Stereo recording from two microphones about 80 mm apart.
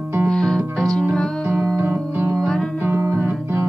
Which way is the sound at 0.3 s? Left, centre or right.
Centre.